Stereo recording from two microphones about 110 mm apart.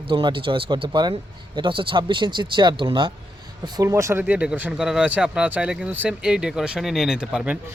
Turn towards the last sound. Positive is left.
turn(degrees=-10)  # may be behind; listen again after turning